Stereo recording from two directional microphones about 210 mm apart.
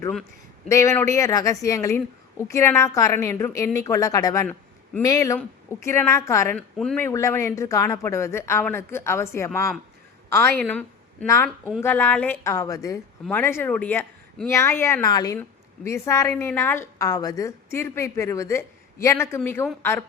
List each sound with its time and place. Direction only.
0.7 s a woman's voice: 15° left (ahead or behind)